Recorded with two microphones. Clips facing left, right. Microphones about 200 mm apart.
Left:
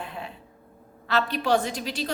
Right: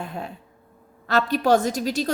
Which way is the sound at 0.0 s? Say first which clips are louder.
Right 4 dB; 45° right (ahead or behind).